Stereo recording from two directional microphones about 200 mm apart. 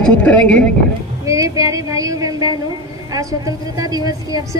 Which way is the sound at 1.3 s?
15° right (ahead or behind).